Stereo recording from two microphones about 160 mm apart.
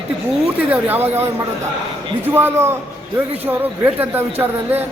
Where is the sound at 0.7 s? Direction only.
10° right (ahead or behind).